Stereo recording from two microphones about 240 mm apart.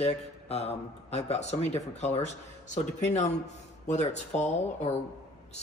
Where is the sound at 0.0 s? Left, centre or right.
Left.